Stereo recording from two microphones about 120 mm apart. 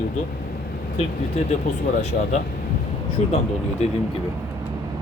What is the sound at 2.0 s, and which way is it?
Speech, 70° left (ahead or behind).